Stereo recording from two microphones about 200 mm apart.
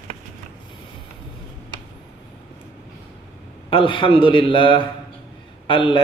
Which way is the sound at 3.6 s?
25° left (ahead or behind).